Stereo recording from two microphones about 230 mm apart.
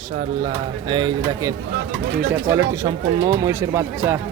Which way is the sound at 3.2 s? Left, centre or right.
Centre.